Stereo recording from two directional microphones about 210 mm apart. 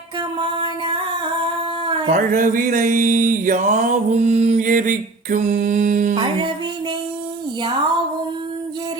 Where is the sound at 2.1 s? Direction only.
40° right (ahead or behind).